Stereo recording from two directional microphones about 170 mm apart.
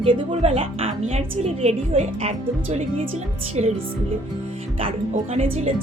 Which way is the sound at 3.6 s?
40° right (ahead or behind).